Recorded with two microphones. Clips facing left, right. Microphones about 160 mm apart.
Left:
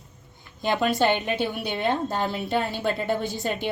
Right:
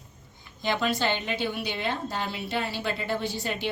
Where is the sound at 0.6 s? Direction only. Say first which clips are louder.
Left 4 dB; 50° left (ahead or behind).